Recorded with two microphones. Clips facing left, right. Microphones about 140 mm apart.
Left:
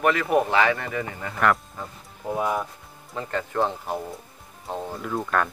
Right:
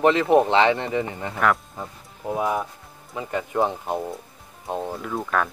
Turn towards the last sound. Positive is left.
turn(degrees=0)  # may be behind; listen again after turning